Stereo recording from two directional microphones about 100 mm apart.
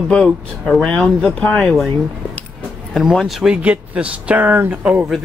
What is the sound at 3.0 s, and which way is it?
Speech, centre (ahead or behind).